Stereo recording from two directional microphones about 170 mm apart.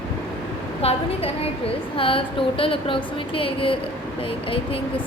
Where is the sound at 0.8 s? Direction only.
35° left (ahead or behind).